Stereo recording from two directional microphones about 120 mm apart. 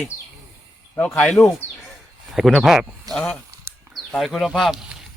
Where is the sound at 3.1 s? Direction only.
10° left (ahead or behind).